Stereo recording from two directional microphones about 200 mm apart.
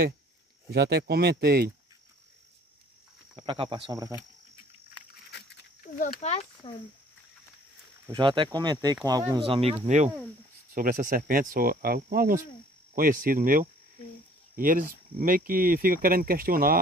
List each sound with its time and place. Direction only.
0.7 s speech: 55° right (ahead or behind)
3.3 s speech: 25° right (ahead or behind)
5.8 s speech: 35° left (ahead or behind)
8.1 s speech: 25° right (ahead or behind); by 16.8 s 45° right (ahead or behind)